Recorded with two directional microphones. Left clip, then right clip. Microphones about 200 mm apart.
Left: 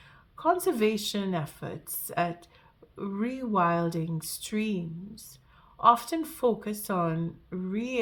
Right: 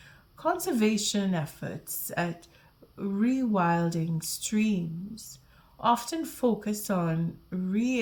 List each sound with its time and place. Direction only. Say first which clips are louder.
0.3 s speech: left 2 dB; 25° left (ahead or behind)
5.8 s speech: left 4 dB; 25° left (ahead or behind)